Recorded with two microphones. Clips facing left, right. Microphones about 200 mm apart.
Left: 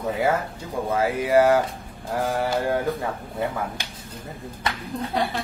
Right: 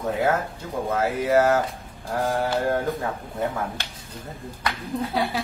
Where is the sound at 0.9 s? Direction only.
10° left (ahead or behind).